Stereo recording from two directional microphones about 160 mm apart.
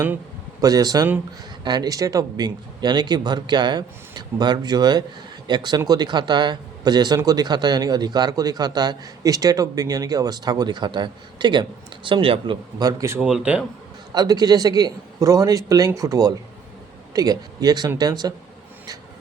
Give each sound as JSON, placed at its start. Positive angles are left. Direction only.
{"t": 0.6, "sound": "speech", "side_deg": -25}
{"t": 13.1, "sound": "speech", "side_deg": -5}
{"t": 14.1, "sound": "speech", "side_deg": -25}